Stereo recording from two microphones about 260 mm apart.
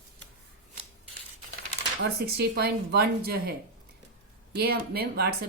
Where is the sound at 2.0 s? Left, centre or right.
Right.